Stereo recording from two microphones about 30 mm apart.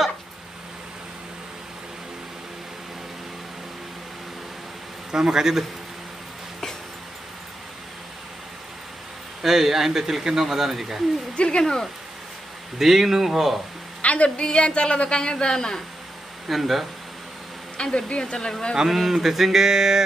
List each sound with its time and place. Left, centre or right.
5.1 s speech: right
9.4 s a sound: centre
11.3 s a woman's voice: left
11.6 s speech: centre
12.7 s a sound: centre
14.0 s a woman's voice: left
14.4 s a woman's voice: left
16.4 s speech: centre
17.9 s a woman's voice: left
18.9 s a sound: centre